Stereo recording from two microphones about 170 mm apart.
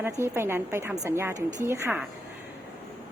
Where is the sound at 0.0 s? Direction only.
15° right (ahead or behind).